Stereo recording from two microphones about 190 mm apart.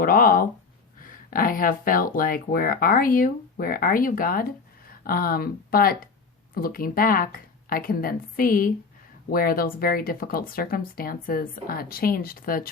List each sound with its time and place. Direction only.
0.0 s speech: 50° left (ahead or behind)